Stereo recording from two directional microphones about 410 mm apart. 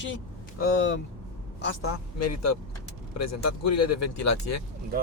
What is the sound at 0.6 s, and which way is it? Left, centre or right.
Speech, left.